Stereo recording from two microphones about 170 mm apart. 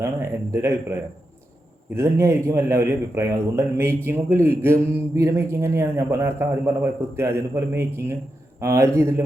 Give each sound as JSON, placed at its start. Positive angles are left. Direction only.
{"t": 0.0, "sound": "a man's voice", "side_deg": -15}
{"t": 2.0, "sound": "a man's voice", "side_deg": -15}